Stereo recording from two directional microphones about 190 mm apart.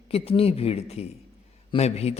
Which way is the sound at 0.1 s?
30° left (ahead or behind).